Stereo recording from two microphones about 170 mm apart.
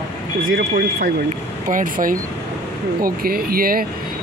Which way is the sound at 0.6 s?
55° right (ahead or behind).